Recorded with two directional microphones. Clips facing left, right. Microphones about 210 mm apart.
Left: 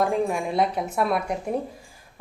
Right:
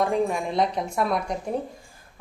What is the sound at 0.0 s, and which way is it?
A woman's voice, 5° left (ahead or behind).